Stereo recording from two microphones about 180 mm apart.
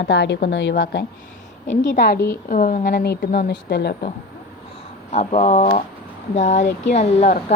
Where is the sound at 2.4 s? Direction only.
50° left (ahead or behind).